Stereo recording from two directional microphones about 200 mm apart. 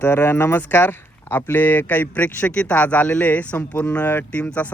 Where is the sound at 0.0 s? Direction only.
10° left (ahead or behind).